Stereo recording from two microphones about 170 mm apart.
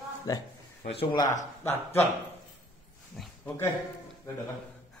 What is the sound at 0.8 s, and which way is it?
Speech, 35° left (ahead or behind).